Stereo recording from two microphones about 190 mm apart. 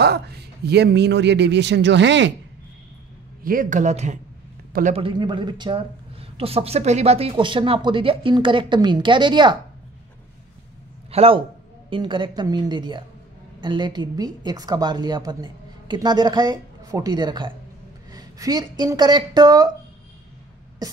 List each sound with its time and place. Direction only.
0.0 s a man's voice: 60° right (ahead or behind)
3.4 s speech: 45° right (ahead or behind)
4.9 s speech: 25° right (ahead or behind)
11.1 s a man's voice: 30° right (ahead or behind)